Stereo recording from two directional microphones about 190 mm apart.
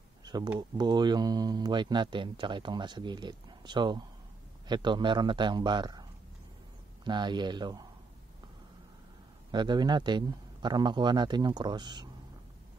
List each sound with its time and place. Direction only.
0.2 s speech: 20° right (ahead or behind)
7.1 s speech: 25° right (ahead or behind)
9.5 s speech: 25° right (ahead or behind)